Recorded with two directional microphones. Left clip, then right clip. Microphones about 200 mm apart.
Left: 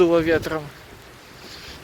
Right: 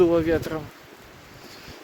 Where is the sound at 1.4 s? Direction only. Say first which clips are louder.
Left 5 dB; 10° right (ahead or behind).